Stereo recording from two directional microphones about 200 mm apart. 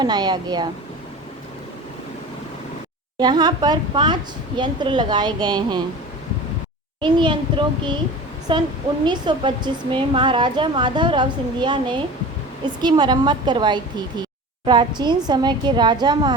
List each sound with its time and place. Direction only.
0.0 s a woman's voice: 20° right (ahead or behind)
3.2 s a woman's voice: 20° right (ahead or behind)
7.0 s a woman's voice: 25° right (ahead or behind)